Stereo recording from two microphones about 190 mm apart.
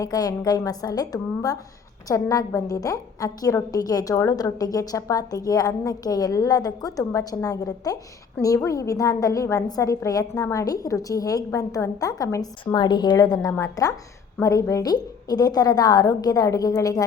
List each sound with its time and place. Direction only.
0.0 s a woman's voice: 20° left (ahead or behind)